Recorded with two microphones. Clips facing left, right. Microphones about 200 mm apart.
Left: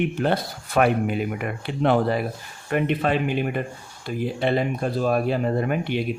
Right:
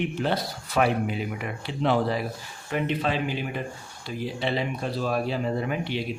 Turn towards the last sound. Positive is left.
turn(degrees=55)  # may be behind; listen again after turning